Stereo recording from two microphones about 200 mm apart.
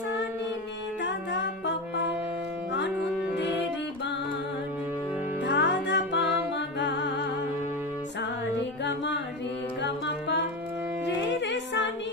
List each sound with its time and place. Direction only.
1.0 s music: 60° left (ahead or behind)
5.4 s music: 60° left (ahead or behind)
8.8 s music: 60° left (ahead or behind)